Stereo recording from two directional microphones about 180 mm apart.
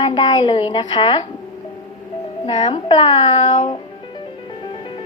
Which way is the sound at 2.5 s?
30° left (ahead or behind).